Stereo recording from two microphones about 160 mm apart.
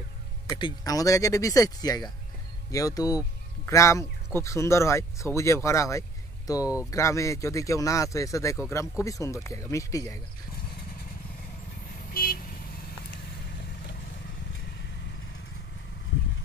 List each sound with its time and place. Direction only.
0.5 s speech: 25° left (ahead or behind)
6.6 s speech: 10° right (ahead or behind)
6.9 s speech: 20° left (ahead or behind)
12.1 s vehicle: 65° left (ahead or behind)